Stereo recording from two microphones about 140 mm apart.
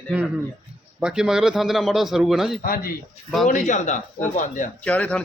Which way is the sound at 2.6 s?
90° left.